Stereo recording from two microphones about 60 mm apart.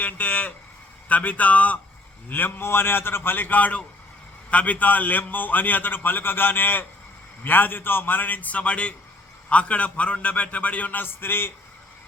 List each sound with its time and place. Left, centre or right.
0.0 s a man's voice: left
2.3 s a man's voice: left